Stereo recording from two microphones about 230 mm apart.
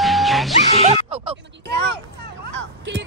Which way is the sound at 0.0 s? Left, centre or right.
Centre.